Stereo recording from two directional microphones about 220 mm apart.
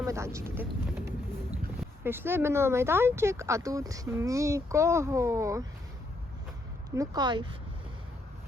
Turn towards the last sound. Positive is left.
turn(degrees=-20)  # may be behind; listen again after turning